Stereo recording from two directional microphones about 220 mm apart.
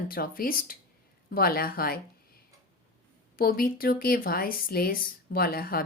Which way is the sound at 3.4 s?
40° left (ahead or behind).